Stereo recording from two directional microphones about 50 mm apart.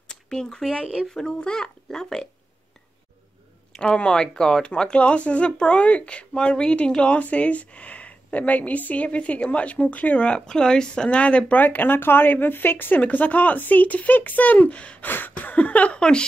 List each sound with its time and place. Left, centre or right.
0.1 s a sound: centre
1.1 s a child's voice: centre
3.7 s speech: centre
10.4 s speech: centre
11.6 s speech: left
15.0 s a sound: left
16.0 s speech: centre